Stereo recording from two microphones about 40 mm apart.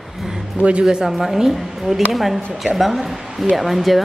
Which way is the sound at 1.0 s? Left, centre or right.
Centre.